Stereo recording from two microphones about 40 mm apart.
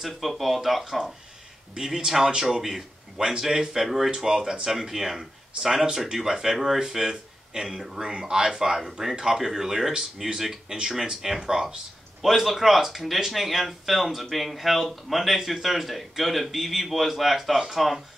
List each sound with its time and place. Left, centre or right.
0.0 s speech: centre
12.2 s speech: centre